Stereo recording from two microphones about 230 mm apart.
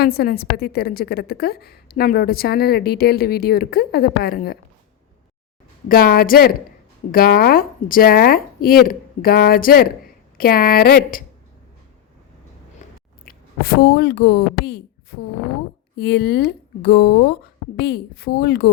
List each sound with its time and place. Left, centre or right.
0.0 s a woman's voice: left
5.9 s speech: left
13.6 s a woman's voice: left